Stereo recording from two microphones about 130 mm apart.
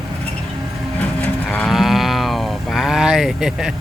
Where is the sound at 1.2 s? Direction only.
5° left (ahead or behind).